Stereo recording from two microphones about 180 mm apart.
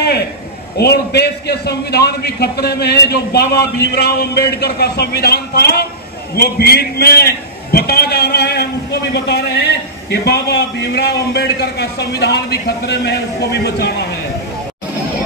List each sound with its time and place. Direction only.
0.7 s a man's voice: 65° left (ahead or behind)